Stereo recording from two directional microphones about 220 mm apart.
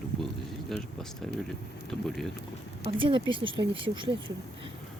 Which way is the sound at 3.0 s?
25° right (ahead or behind).